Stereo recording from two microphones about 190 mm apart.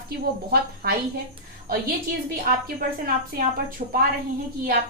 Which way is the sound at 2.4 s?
50° right (ahead or behind).